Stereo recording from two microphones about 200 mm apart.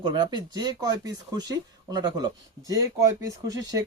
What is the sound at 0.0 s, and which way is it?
Speech, 20° right (ahead or behind).